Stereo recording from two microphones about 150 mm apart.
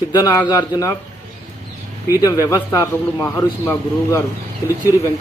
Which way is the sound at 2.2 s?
25° left (ahead or behind).